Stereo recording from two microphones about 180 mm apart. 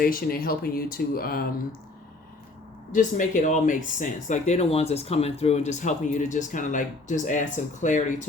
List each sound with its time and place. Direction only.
0.0 s speech: 50° left (ahead or behind)
2.9 s speech: 45° left (ahead or behind)